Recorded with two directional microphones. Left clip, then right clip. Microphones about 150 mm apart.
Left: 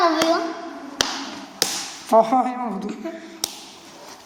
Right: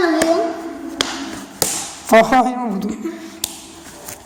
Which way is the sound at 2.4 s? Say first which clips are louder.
Right 6 dB; 10° right (ahead or behind).